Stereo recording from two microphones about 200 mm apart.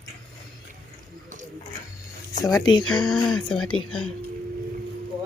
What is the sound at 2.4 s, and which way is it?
Speech, 20° left (ahead or behind).